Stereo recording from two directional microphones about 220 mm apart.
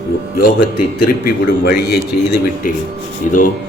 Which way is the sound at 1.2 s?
50° left (ahead or behind).